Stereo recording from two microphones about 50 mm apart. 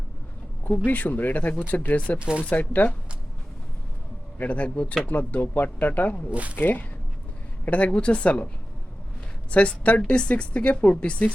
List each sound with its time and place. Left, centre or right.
0.9 s speech: left
2.1 s speech: right
2.5 s speech: left
4.4 s speech: left
6.3 s speech: right
6.6 s a woman's voice: left
9.5 s speech: left